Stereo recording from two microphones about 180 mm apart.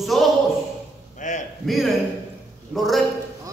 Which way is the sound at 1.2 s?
45° left (ahead or behind).